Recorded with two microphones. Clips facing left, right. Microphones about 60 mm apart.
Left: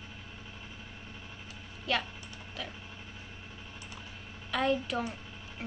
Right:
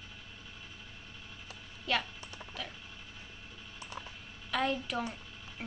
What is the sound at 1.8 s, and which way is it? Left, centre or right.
Typing, centre.